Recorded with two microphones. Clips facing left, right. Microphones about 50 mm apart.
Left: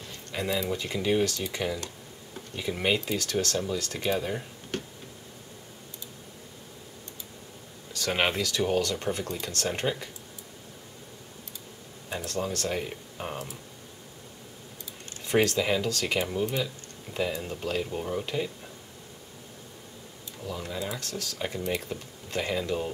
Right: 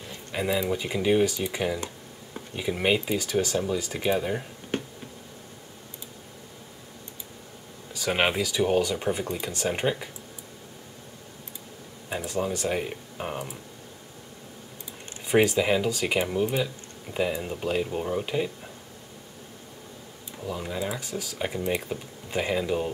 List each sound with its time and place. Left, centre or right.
0.0 s speech: centre
4.7 s a sound: right
7.9 s speech: centre
12.1 s speech: centre
15.2 s speech: centre
20.4 s speech: centre